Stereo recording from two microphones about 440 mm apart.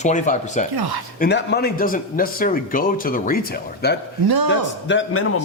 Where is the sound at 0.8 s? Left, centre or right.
Right.